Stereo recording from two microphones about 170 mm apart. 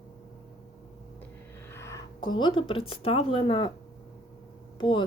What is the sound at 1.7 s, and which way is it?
Speech, 15° left (ahead or behind).